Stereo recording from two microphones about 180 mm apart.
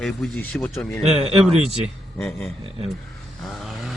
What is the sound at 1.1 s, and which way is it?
Speech, 35° right (ahead or behind).